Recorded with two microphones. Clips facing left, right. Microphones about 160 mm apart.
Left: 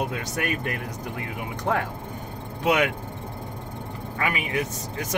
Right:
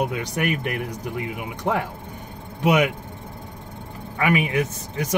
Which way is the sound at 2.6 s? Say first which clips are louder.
Right 3 dB; 10° right (ahead or behind).